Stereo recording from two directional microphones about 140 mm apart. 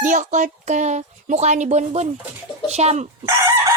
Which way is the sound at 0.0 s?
65° right (ahead or behind).